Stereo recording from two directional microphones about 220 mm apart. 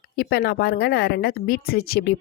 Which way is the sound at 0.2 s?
45° left (ahead or behind).